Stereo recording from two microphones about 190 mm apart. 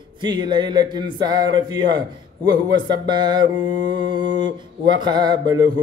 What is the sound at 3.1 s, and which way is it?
Speech, 25° right (ahead or behind).